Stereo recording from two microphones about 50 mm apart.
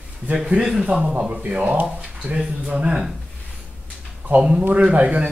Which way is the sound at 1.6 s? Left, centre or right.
Right.